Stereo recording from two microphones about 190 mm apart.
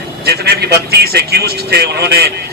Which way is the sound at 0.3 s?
55° right (ahead or behind).